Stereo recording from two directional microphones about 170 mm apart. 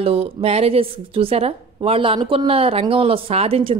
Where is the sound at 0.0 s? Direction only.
35° right (ahead or behind).